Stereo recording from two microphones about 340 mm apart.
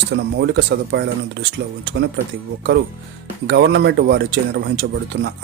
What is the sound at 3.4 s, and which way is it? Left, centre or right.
Speech, right.